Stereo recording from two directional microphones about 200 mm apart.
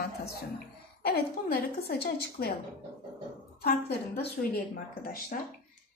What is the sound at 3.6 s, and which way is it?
A woman's voice, 50° left (ahead or behind).